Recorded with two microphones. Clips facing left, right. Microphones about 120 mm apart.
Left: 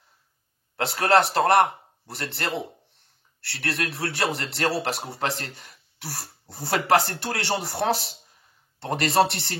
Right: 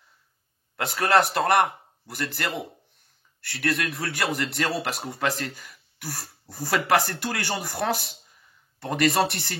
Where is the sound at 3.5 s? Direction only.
30° left (ahead or behind).